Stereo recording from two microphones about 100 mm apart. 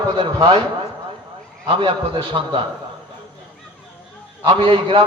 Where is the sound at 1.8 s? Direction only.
55° right (ahead or behind).